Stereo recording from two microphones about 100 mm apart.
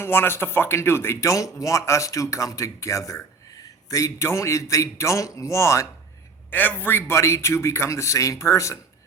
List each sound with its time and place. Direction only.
0.0 s speech: 25° left (ahead or behind)
6.5 s a man's voice: 15° left (ahead or behind)